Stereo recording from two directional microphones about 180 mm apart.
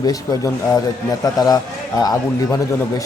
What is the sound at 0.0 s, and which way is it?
Speech, 20° left (ahead or behind).